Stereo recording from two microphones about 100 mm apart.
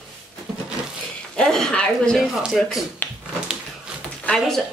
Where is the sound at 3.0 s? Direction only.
20° left (ahead or behind).